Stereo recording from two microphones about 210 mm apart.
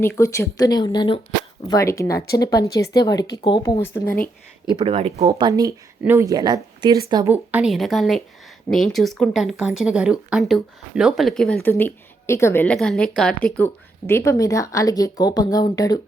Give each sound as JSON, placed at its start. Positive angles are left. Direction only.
{"t": 0.0, "sound": "a woman's voice", "side_deg": 15}
{"t": 4.7, "sound": "speech", "side_deg": -25}
{"t": 5.5, "sound": "a woman's voice", "side_deg": -15}